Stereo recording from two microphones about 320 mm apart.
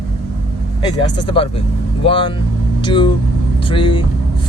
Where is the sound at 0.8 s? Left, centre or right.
Centre.